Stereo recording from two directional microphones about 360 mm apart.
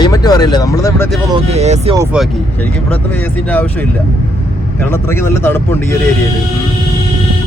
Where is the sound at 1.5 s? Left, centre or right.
Centre.